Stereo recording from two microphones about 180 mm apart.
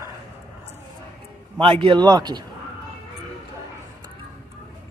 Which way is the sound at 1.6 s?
30° right (ahead or behind).